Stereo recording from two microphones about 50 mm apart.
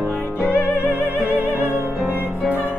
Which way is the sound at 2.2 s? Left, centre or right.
Centre.